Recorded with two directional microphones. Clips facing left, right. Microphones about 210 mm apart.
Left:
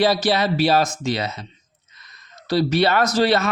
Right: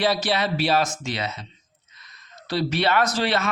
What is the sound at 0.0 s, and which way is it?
A man's voice, 40° left (ahead or behind).